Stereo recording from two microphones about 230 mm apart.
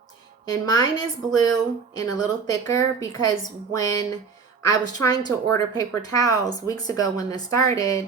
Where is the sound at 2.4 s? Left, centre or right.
Centre.